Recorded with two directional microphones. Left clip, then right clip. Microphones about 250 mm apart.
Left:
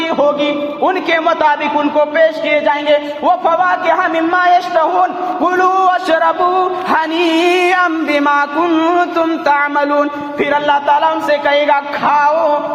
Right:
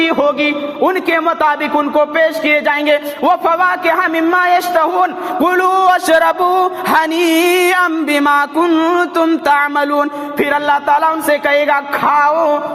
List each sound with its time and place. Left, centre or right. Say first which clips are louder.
0.0 s a man's voice: even; right